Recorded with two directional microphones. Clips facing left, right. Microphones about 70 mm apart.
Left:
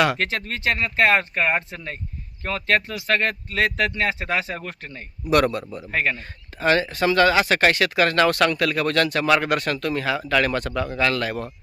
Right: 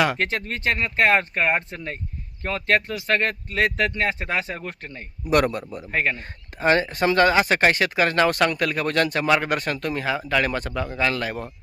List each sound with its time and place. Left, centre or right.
0.2 s speech: right
5.2 s speech: centre
5.9 s speech: right
7.3 s speech: centre